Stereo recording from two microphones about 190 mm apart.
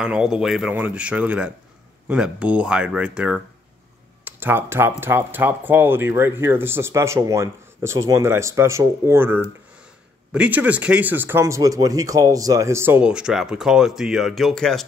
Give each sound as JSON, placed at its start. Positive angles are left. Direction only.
{"t": 0.0, "sound": "speech", "side_deg": -5}